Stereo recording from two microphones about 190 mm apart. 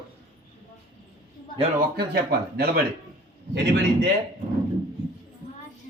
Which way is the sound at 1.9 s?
55° right (ahead or behind).